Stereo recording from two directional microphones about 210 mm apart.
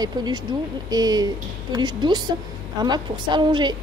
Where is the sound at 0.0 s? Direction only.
20° right (ahead or behind).